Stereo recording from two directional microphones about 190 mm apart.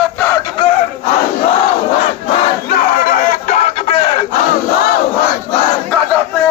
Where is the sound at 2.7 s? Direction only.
45° left (ahead or behind).